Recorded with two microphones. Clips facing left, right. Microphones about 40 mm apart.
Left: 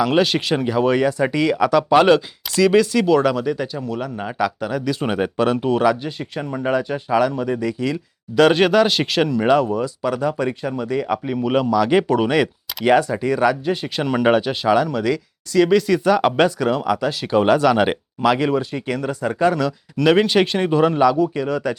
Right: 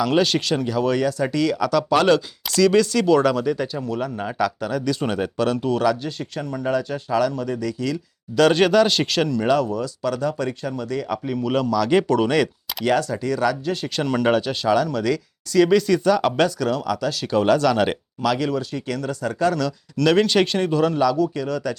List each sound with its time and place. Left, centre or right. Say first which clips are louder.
0.0 s speech: left 2 dB; centre
16.1 s speech: left 3 dB; centre